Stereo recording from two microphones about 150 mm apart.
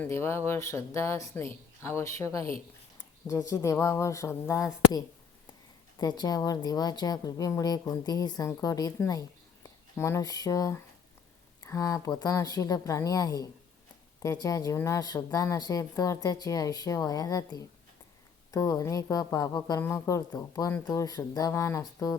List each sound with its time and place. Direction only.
0.0 s speech: 15° left (ahead or behind)